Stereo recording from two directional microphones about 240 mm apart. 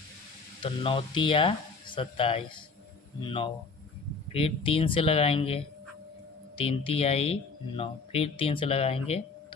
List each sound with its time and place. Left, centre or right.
0.6 s speech: left